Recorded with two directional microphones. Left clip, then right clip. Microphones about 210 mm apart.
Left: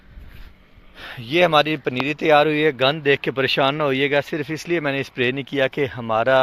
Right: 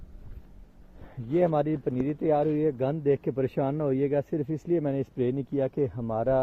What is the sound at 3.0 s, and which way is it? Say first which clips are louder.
Speech: left 8 dB; 5° left (ahead or behind).